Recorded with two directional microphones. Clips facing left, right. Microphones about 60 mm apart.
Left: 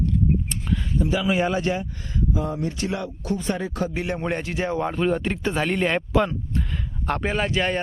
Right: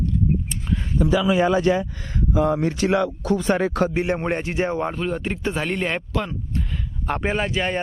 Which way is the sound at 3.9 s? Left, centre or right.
Right.